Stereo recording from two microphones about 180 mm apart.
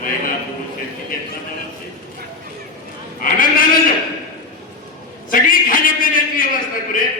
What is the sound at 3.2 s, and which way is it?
Speech, 50° left (ahead or behind).